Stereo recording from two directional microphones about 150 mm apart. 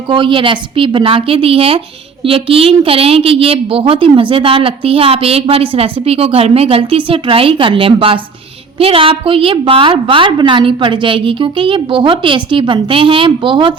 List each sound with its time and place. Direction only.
0.1 s a woman's voice: 35° right (ahead or behind)